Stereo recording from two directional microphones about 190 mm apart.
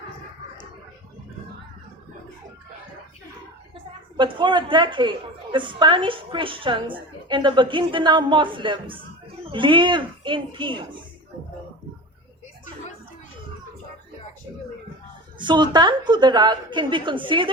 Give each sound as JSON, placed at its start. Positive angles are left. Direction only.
{"t": 4.2, "sound": "a woman's voice", "side_deg": -25}
{"t": 15.4, "sound": "a woman's voice", "side_deg": -25}